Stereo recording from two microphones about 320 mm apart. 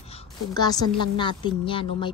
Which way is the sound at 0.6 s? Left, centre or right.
Centre.